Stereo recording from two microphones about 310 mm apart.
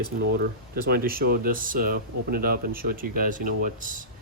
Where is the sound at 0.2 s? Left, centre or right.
Right.